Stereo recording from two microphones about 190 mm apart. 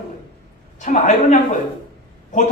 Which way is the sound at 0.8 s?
40° left (ahead or behind).